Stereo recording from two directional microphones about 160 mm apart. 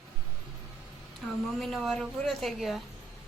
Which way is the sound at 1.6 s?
Centre (ahead or behind).